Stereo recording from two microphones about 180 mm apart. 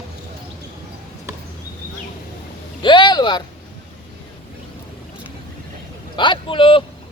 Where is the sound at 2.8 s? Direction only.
25° left (ahead or behind).